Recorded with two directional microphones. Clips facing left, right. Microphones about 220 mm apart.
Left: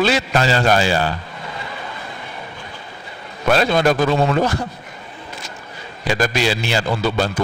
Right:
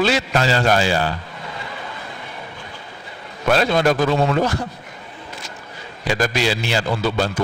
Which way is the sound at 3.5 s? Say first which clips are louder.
Left 1 dB; 25° left (ahead or behind).